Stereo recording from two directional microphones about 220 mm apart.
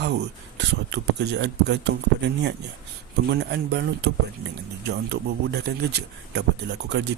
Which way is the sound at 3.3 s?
45° right (ahead or behind).